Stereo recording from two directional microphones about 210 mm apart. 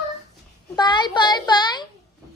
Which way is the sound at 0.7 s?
20° left (ahead or behind).